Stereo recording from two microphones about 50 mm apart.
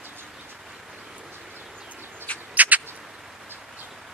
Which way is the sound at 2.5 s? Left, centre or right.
Right.